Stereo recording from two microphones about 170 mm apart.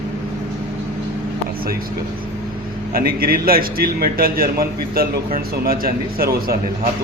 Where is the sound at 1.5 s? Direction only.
60° right (ahead or behind).